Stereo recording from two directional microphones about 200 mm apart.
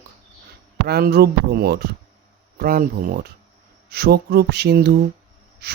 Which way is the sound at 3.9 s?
55° right (ahead or behind).